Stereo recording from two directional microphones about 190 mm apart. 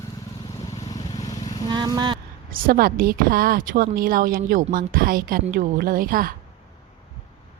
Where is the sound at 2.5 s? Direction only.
50° right (ahead or behind).